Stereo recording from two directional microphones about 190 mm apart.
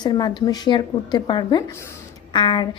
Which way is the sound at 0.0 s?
20° left (ahead or behind).